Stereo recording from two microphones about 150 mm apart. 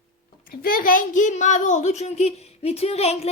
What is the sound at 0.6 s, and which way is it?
A child's voice, 75° left (ahead or behind).